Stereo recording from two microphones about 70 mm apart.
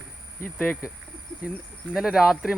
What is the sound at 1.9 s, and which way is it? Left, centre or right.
Speech, centre.